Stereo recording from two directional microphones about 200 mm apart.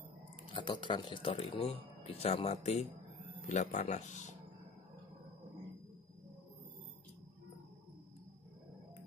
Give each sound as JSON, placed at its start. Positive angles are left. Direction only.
{"t": 0.5, "sound": "speech", "side_deg": 25}